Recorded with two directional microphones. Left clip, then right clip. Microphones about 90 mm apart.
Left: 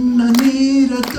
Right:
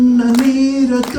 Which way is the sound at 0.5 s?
35° right (ahead or behind).